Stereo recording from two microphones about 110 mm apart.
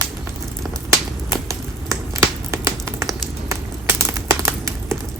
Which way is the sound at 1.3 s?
30° right (ahead or behind).